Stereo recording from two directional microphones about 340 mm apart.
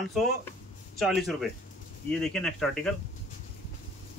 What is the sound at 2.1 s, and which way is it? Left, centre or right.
Speech, centre.